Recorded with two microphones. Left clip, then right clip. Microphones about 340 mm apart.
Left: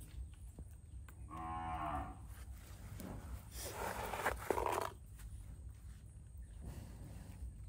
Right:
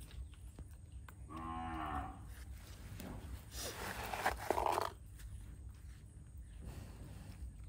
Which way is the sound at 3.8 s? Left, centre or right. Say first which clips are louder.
Even; centre.